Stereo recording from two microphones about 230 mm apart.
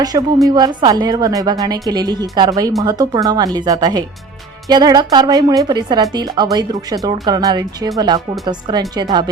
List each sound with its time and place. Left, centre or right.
0.0 s a woman's voice: centre